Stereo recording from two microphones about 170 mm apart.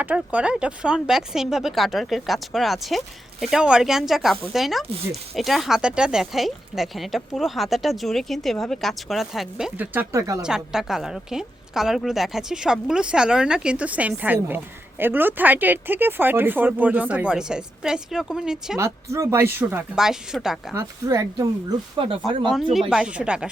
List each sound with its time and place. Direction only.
0.0 s a woman's voice: 10° right (ahead or behind)
10.4 s a woman's voice: 5° right (ahead or behind)
19.1 s speech: 15° right (ahead or behind)
20.0 s a woman's voice: 5° right (ahead or behind)
20.7 s speech: 20° right (ahead or behind)
22.4 s a woman's voice: centre (ahead or behind)